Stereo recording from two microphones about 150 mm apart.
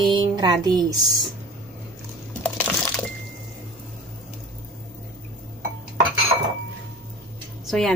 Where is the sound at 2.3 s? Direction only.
10° left (ahead or behind).